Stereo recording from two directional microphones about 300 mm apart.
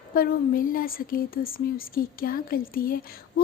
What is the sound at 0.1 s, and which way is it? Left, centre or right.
A woman's voice, left.